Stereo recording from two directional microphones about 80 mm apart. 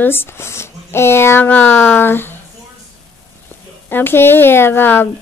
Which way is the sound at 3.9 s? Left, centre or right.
Left.